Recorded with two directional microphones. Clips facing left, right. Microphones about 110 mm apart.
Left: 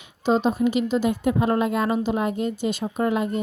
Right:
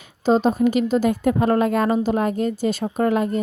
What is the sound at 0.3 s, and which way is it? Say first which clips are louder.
A woman's voice: right 3 dB; 40° right (ahead or behind).